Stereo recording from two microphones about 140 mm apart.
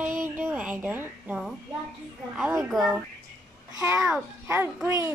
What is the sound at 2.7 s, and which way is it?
Speech, centre (ahead or behind).